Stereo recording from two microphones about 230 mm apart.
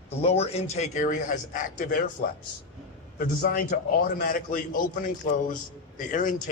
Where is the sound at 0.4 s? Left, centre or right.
Left.